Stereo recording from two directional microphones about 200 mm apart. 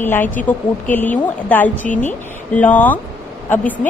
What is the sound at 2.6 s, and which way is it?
Speech, 10° left (ahead or behind).